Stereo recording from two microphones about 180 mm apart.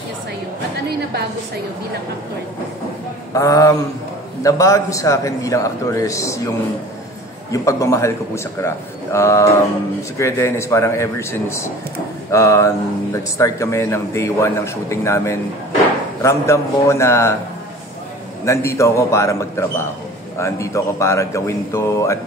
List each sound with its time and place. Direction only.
3.3 s speech: 20° left (ahead or behind)
7.5 s speech: 15° left (ahead or behind)
18.4 s speech: 15° left (ahead or behind)